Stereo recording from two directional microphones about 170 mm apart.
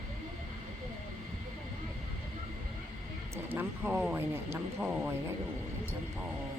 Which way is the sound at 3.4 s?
10° right (ahead or behind).